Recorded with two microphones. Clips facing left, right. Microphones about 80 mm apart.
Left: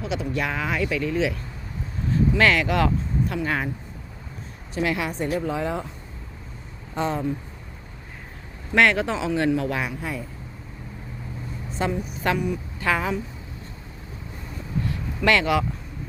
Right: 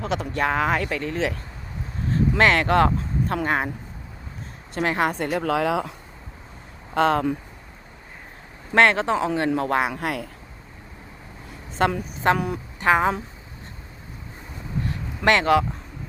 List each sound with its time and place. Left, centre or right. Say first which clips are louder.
0.0 s speech: right 2 dB; right
2.0 s a sound: left 1 dB; right
2.4 s speech: right 4 dB; right
4.7 s speech: right 3 dB; right
5.4 s speech: right 4 dB; right
6.9 s speech: right 5 dB; right
8.7 s speech: right 2 dB; right
9.1 s speech: right 1 dB; right
9.9 s speech: right 4 dB; right
11.8 s a woman's voice: right 4 dB; right
12.2 s speech: right 3 dB; right
14.8 s boat: right 1 dB; right